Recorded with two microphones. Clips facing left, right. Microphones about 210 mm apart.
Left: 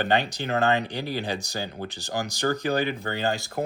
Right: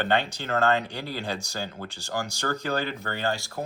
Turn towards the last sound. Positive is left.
turn(degrees=20)  # may be behind; listen again after turning